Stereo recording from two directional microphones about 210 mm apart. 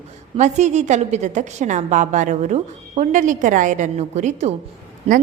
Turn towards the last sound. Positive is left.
turn(degrees=-30)  # may be behind; listen again after turning